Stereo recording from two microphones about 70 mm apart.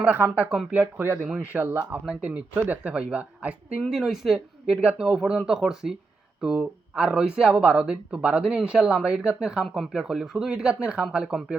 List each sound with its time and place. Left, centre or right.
0.0 s speech: right
1.0 s speech: right
2.0 s speech: centre
3.8 s speech: centre